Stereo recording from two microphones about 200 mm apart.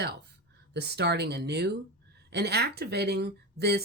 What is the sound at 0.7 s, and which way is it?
Speech, 55° right (ahead or behind).